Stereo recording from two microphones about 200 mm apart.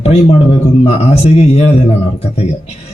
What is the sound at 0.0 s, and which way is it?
A man's voice, 30° left (ahead or behind).